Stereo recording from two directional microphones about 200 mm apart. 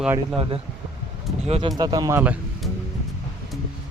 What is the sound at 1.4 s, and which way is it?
Speech, 30° right (ahead or behind).